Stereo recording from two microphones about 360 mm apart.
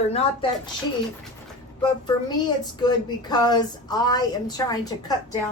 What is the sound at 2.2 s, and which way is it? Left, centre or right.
Speech, centre.